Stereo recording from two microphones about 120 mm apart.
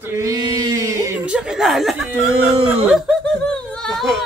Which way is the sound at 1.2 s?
5° right (ahead or behind).